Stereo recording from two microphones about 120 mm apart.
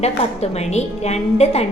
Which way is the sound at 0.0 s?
60° left (ahead or behind).